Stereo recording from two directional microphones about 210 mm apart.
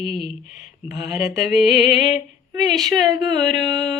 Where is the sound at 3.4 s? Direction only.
Centre (ahead or behind).